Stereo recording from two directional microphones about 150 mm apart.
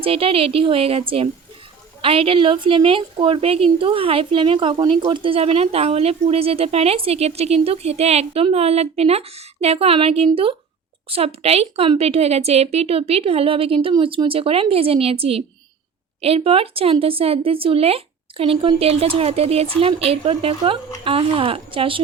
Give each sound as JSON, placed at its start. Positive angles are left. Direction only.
{"t": 0.0, "sound": "a woman's voice", "side_deg": -40}